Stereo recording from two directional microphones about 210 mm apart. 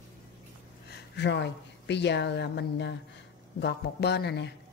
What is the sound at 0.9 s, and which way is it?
A woman's voice, 55° left (ahead or behind).